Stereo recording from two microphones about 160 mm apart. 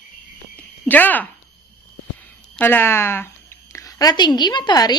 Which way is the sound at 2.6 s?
15° left (ahead or behind).